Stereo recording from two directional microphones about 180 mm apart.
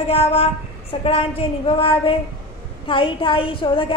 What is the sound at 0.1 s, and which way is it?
A woman's voice, 35° left (ahead or behind).